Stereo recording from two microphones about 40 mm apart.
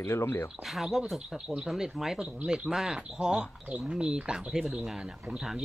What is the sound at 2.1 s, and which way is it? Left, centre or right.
Speech, right.